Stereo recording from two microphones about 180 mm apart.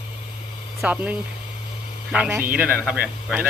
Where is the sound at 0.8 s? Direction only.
10° right (ahead or behind).